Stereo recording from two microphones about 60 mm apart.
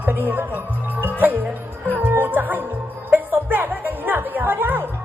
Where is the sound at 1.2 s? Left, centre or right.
Right.